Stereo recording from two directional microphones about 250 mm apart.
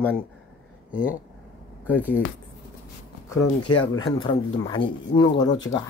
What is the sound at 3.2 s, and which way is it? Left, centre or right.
Speech, centre.